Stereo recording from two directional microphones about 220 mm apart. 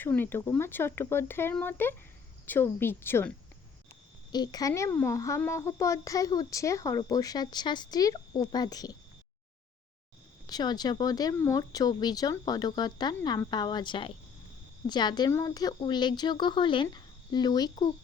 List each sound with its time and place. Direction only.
0.0 s a woman's voice: 10° left (ahead or behind)
10.4 s a woman's voice: 20° left (ahead or behind)